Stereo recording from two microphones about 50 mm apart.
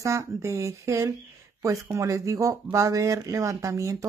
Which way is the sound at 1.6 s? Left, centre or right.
Right.